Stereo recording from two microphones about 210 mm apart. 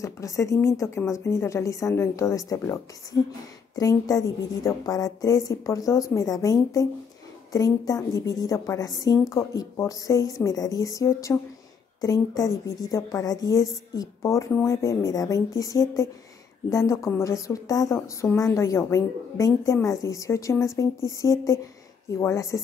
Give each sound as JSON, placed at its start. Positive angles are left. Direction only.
{"t": 0.0, "sound": "a woman's voice", "side_deg": 15}